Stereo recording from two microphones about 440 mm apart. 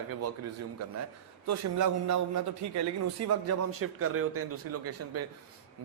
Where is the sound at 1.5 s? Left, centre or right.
Right.